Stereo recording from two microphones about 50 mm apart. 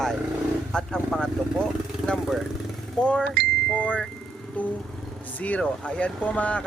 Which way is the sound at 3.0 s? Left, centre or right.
Left.